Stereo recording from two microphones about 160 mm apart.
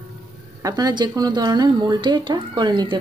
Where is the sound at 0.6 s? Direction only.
25° right (ahead or behind).